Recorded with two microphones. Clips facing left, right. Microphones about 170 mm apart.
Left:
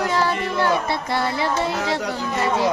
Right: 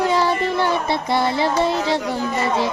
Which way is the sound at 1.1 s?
20° right (ahead or behind).